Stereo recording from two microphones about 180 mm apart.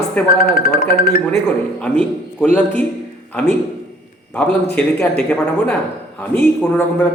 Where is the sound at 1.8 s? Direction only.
5° left (ahead or behind).